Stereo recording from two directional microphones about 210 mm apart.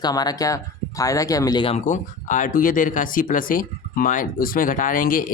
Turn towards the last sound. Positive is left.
turn(degrees=40)  # may be behind; listen again after turning